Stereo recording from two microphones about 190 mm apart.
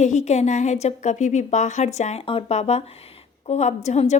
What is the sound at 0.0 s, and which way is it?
A woman's voice, 40° left (ahead or behind).